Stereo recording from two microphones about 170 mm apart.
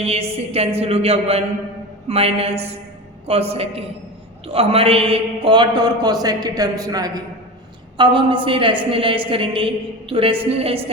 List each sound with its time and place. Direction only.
0.0 s a woman's voice: 35° right (ahead or behind)